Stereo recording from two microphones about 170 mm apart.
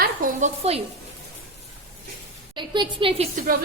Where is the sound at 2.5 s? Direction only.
25° right (ahead or behind).